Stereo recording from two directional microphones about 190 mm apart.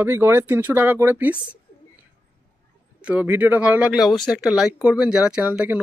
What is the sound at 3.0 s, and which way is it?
Speech, 10° right (ahead or behind).